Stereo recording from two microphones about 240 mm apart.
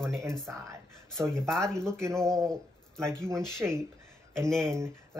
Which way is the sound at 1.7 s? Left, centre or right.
Centre.